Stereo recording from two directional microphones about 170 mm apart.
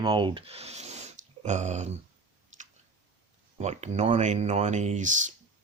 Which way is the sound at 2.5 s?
45° right (ahead or behind).